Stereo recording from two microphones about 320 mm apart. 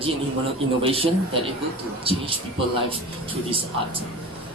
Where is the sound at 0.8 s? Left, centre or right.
Centre.